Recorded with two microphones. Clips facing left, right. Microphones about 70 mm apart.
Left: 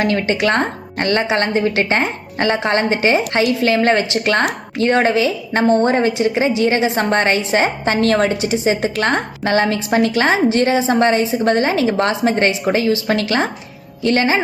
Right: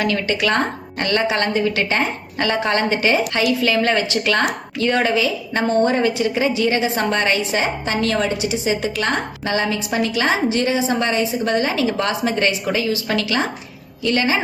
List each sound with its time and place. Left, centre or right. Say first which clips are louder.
0.0 s a woman's voice: left 3 dB; left
9.7 s a woman's voice: left 5 dB; left